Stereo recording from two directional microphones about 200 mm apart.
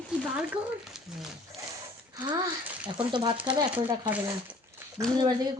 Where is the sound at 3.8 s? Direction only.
10° right (ahead or behind).